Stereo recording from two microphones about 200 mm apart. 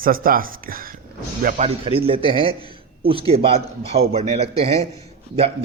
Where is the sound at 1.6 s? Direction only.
30° right (ahead or behind).